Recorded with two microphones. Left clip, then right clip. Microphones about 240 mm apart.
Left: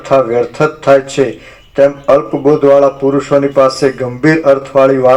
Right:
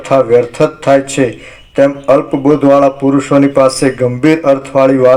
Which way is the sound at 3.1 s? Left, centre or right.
Right.